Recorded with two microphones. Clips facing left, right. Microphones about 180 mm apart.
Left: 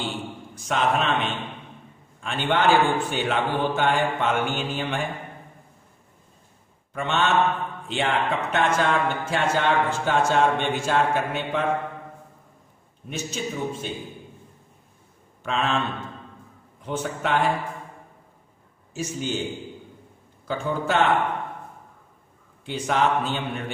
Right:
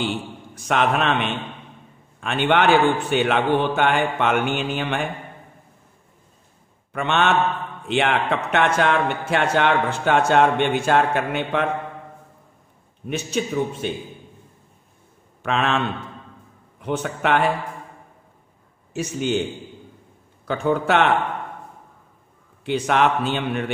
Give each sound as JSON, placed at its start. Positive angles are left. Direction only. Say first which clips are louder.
{"t": 0.6, "sound": "a man's voice", "louder": "right 3 dB", "side_deg": -65}
{"t": 2.1, "sound": "a man's voice", "louder": "right 5 dB", "side_deg": -65}
{"t": 6.9, "sound": "a man's voice", "louder": "right 3 dB", "side_deg": -65}
{"t": 13.1, "sound": "a man's voice", "louder": "right 6 dB", "side_deg": -65}
{"t": 15.4, "sound": "a man's voice", "louder": "right 3 dB", "side_deg": -70}
{"t": 16.8, "sound": "a man's voice", "louder": "right 4 dB", "side_deg": -65}
{"t": 18.9, "sound": "a man's voice", "louder": "right 6 dB", "side_deg": -65}
{"t": 20.4, "sound": "a man's voice", "louder": "right 5 dB", "side_deg": -65}
{"t": 22.7, "sound": "a man's voice", "louder": "right 3 dB", "side_deg": -70}